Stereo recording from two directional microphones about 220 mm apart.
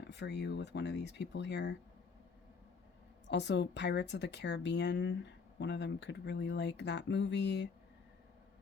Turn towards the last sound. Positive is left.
turn(degrees=50)  # may be behind; listen again after turning